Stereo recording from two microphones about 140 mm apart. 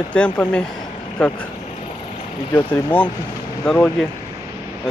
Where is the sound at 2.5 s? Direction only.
15° left (ahead or behind).